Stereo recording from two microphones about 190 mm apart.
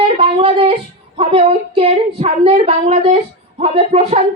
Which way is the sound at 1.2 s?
30° right (ahead or behind).